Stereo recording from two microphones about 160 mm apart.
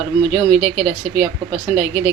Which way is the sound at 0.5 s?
15° right (ahead or behind).